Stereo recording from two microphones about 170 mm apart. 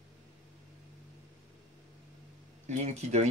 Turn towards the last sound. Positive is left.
turn(degrees=-40)  # may be behind; listen again after turning